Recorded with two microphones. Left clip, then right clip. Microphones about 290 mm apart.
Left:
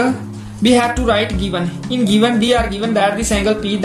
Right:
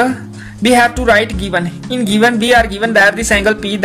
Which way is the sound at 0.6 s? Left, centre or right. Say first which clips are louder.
Right 4 dB; right.